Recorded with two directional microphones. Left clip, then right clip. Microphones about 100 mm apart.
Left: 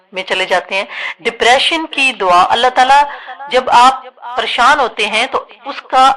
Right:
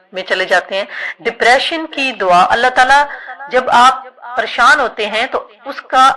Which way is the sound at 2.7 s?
35° left (ahead or behind).